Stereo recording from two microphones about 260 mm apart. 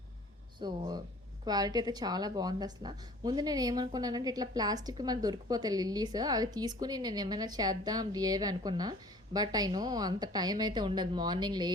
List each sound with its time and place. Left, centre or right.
0.6 s a woman's voice: centre